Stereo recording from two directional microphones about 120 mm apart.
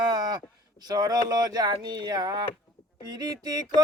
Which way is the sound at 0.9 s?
35° right (ahead or behind).